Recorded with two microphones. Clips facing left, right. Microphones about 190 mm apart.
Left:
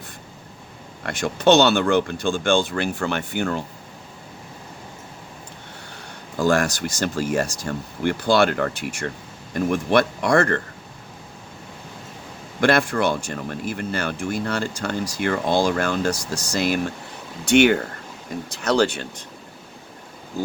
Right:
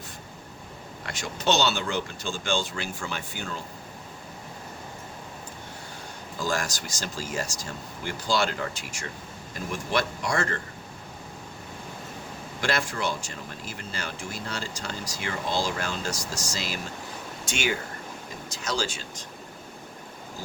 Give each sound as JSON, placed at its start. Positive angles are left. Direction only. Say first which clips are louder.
{"t": 1.0, "sound": "speech", "louder": "left 9 dB", "side_deg": 55}
{"t": 6.4, "sound": "speech", "louder": "left 10 dB", "side_deg": 60}
{"t": 12.5, "sound": "speech", "louder": "left 10 dB", "side_deg": 60}